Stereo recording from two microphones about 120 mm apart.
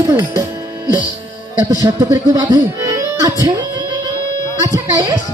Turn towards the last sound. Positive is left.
turn(degrees=-30)  # may be behind; listen again after turning